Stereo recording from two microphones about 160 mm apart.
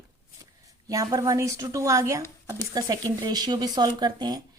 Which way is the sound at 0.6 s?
20° right (ahead or behind).